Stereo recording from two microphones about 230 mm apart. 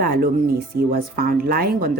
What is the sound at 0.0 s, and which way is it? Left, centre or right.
Speech, right.